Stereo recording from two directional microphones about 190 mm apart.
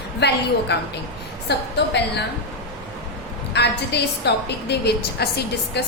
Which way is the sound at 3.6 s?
65° left (ahead or behind).